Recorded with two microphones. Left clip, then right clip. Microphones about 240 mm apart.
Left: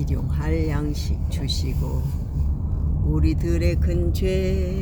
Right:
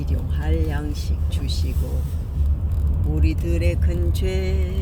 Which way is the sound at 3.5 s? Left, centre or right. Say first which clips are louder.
Left 1 dB; centre.